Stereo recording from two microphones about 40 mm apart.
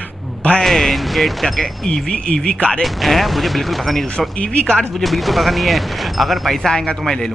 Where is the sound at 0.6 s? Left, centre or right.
Centre.